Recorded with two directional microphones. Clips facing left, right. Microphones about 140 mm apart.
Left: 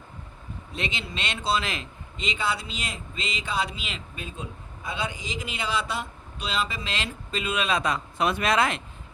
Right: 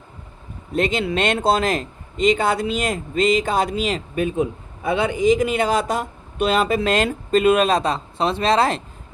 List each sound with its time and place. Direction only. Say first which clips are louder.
0.7 s a man's voice: right 13 dB; 50° right (ahead or behind)
4.1 s a man's voice: right 16 dB; 60° right (ahead or behind); by 8.8 s 35° right (ahead or behind)